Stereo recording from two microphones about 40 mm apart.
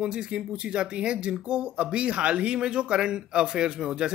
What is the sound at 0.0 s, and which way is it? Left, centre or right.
Speech, right.